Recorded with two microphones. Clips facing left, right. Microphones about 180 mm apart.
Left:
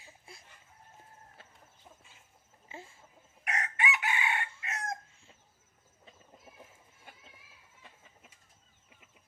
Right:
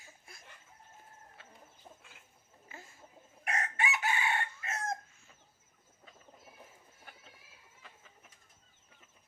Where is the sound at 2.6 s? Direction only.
30° left (ahead or behind).